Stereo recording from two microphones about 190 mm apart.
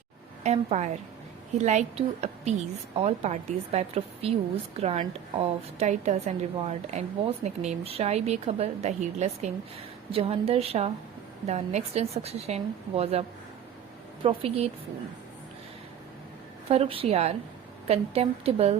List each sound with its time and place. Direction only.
0.4 s a woman's voice: 35° right (ahead or behind)
16.6 s a woman's voice: 30° right (ahead or behind)